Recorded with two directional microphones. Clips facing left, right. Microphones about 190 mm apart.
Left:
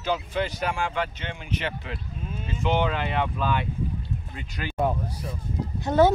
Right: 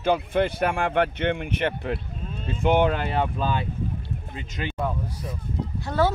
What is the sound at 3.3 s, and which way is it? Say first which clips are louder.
Speech: even; 30° right (ahead or behind).